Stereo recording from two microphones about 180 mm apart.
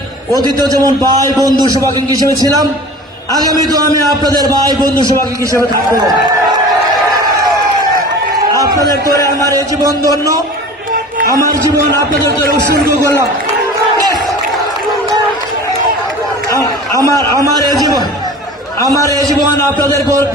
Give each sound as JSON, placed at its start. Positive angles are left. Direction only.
{"t": 0.3, "sound": "a man's voice", "side_deg": -20}
{"t": 9.5, "sound": "a man's voice", "side_deg": -20}
{"t": 12.9, "sound": "speech", "side_deg": -15}
{"t": 16.5, "sound": "a sound", "side_deg": 20}
{"t": 17.0, "sound": "a man's voice", "side_deg": -20}